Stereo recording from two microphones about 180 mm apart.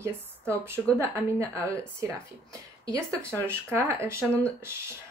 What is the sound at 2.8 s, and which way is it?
Speech, 20° right (ahead or behind).